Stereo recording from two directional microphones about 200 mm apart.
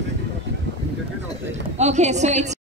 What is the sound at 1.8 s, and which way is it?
Speech, 35° right (ahead or behind).